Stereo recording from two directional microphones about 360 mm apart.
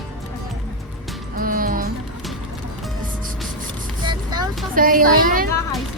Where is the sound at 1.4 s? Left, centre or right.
Right.